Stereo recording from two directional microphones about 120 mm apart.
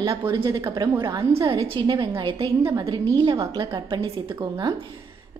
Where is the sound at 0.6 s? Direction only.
30° right (ahead or behind).